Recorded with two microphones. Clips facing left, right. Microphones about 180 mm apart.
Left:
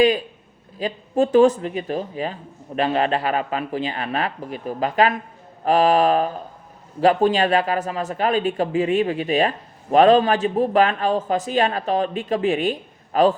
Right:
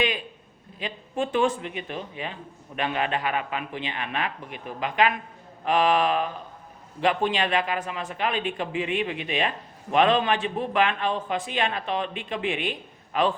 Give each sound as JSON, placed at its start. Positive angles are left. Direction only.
{"t": 0.8, "sound": "speech", "side_deg": 40}